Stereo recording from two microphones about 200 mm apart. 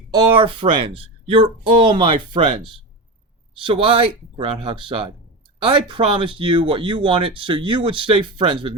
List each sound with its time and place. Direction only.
0.1 s speech: 20° right (ahead or behind)
3.7 s speech: 25° right (ahead or behind)